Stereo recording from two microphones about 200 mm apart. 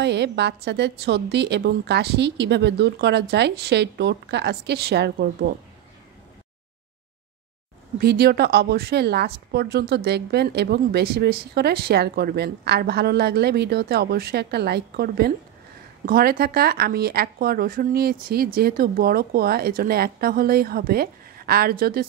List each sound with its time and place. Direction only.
0.0 s a woman's voice: 60° right (ahead or behind)
8.0 s a woman's voice: 50° right (ahead or behind)